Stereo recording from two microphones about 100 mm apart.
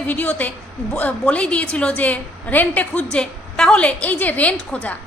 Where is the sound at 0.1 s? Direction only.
15° left (ahead or behind).